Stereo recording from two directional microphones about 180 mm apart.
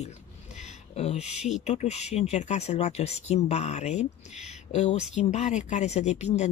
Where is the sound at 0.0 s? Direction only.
40° left (ahead or behind).